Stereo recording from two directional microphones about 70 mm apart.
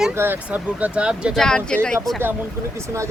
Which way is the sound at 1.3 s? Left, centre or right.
Centre.